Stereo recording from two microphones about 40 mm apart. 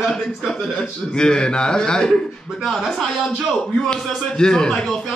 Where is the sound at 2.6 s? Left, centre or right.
Centre.